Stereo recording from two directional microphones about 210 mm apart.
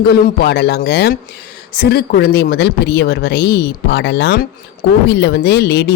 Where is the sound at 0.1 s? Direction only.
45° left (ahead or behind).